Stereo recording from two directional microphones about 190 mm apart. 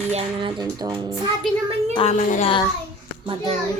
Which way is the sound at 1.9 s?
35° left (ahead or behind).